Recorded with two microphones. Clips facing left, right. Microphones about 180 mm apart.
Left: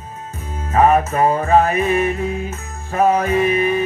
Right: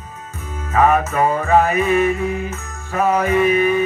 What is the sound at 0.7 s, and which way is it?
Music, 30° left (ahead or behind).